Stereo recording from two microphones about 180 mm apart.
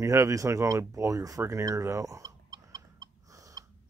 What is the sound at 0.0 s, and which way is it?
Speech, 15° right (ahead or behind).